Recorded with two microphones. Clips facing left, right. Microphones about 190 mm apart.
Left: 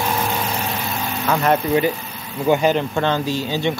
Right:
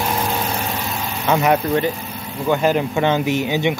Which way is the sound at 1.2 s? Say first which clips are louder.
Right 2 dB; 15° right (ahead or behind).